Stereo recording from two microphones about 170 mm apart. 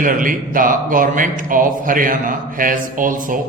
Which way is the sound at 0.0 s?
55° right (ahead or behind).